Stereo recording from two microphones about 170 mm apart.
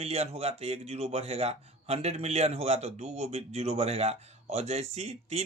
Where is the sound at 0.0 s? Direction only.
40° right (ahead or behind).